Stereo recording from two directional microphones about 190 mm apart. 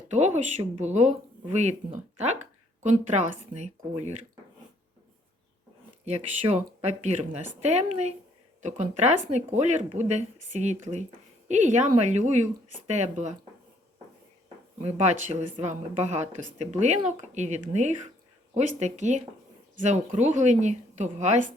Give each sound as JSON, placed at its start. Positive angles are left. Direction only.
{"t": 0.1, "sound": "speech", "side_deg": -35}
{"t": 6.1, "sound": "speech", "side_deg": -35}
{"t": 14.8, "sound": "speech", "side_deg": -35}